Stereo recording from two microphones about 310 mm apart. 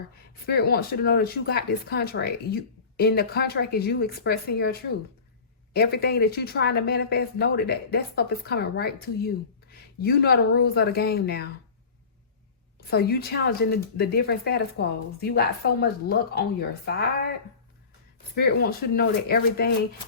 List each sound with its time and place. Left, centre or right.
0.4 s speech: left
12.9 s speech: left
18.3 s speech: left